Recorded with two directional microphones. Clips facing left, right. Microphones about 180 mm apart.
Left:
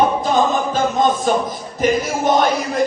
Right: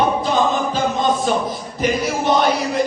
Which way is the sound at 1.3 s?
45° left (ahead or behind).